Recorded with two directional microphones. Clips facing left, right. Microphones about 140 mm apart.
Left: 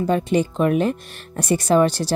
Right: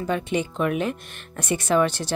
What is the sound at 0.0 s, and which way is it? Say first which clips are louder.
Speech: left 6 dB; 35° left (ahead or behind).